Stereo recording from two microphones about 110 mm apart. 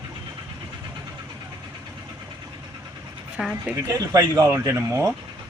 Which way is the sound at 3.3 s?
10° right (ahead or behind).